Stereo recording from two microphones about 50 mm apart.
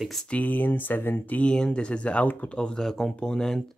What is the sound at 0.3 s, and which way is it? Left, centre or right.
Speech, left.